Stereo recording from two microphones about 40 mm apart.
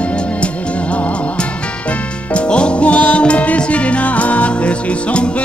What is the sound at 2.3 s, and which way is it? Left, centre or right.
Music, left.